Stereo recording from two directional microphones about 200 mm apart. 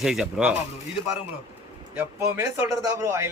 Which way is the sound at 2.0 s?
15° right (ahead or behind).